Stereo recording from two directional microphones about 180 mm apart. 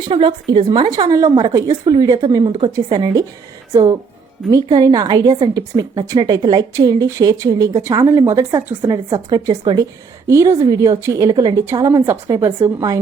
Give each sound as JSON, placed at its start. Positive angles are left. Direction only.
{"t": 0.0, "sound": "a woman's voice", "side_deg": -30}